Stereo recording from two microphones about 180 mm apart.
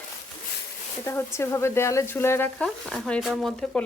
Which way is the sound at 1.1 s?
15° left (ahead or behind).